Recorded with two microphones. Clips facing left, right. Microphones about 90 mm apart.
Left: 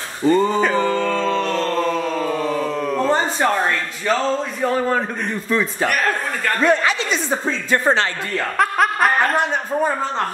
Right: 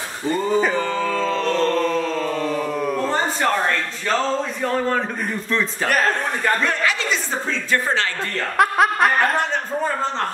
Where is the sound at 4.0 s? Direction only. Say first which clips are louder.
Left 2 dB; 5° left (ahead or behind).